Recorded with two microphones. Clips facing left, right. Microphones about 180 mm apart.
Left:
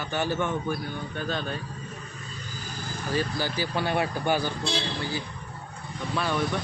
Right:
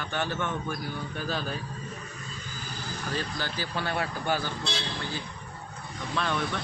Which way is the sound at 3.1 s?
10° left (ahead or behind).